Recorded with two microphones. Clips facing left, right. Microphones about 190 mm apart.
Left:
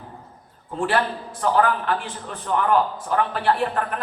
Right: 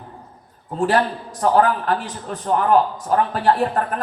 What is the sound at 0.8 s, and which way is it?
A man's voice, 40° right (ahead or behind).